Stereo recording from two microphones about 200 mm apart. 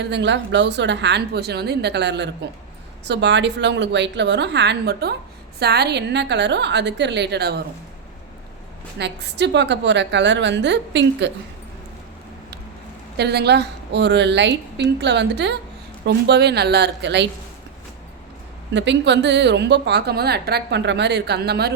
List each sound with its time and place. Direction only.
0.0 s a woman's voice: 60° right (ahead or behind)
9.0 s a woman's voice: 60° right (ahead or behind)
13.1 s a woman's voice: 55° right (ahead or behind)
18.7 s a woman's voice: 60° right (ahead or behind)